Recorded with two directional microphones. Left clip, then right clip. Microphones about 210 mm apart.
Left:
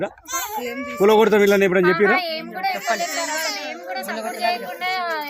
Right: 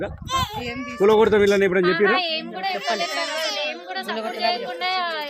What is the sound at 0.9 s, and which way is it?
Speech, 50° left (ahead or behind).